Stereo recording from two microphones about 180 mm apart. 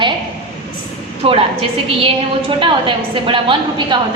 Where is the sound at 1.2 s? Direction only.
30° right (ahead or behind).